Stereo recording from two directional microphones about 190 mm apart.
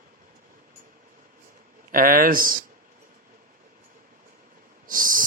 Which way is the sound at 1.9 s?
50° right (ahead or behind).